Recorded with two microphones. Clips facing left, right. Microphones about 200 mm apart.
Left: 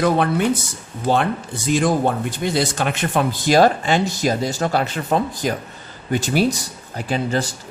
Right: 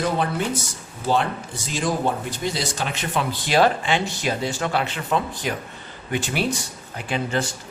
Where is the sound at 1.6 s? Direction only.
55° left (ahead or behind).